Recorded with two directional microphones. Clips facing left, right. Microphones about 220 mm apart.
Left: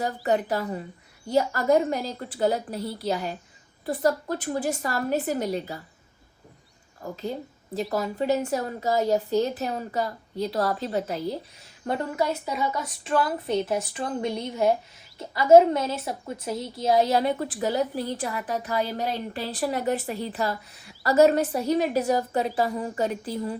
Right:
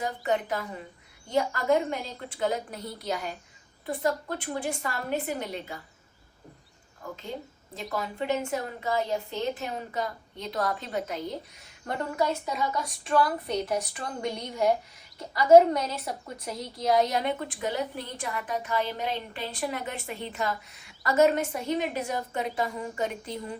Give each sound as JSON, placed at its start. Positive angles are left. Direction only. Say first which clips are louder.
{"t": 0.0, "sound": "a woman's voice", "louder": "left 4 dB", "side_deg": 40}
{"t": 7.0, "sound": "a woman's voice", "louder": "left 5 dB", "side_deg": 40}
{"t": 11.9, "sound": "a woman's voice", "louder": "left 2 dB", "side_deg": 20}